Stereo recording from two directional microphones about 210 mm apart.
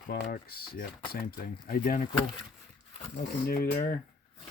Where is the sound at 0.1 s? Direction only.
45° left (ahead or behind).